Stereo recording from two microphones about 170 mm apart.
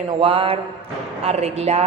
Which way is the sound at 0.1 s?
30° right (ahead or behind).